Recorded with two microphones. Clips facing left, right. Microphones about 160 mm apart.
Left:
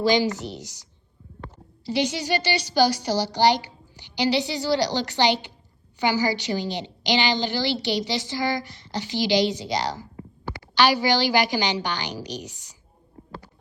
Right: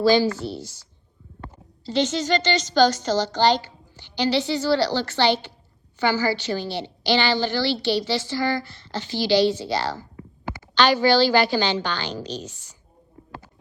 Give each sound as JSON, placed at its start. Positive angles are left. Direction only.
{"t": 0.0, "sound": "a woman's voice", "side_deg": 15}